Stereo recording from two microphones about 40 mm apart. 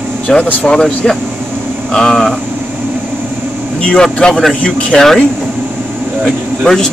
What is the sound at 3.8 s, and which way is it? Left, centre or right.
Speech, left.